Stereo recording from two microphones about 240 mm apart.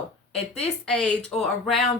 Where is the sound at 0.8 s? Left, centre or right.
Centre.